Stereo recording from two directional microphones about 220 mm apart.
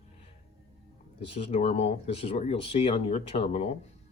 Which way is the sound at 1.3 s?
30° left (ahead or behind).